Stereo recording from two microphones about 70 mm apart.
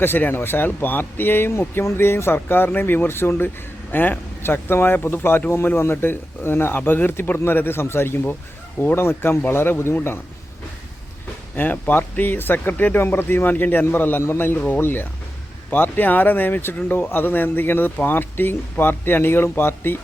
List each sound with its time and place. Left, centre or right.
0.0 s speech: left
11.5 s speech: left